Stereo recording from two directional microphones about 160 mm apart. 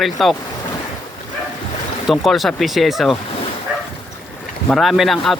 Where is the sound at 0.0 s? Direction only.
Centre (ahead or behind).